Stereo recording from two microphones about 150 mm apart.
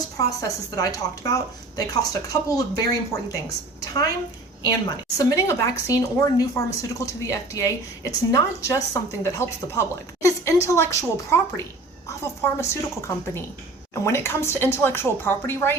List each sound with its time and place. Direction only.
0.2 s a woman's voice: 20° left (ahead or behind)